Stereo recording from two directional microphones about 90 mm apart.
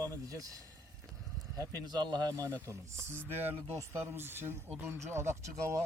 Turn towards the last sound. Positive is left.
turn(degrees=-30)  # may be behind; listen again after turning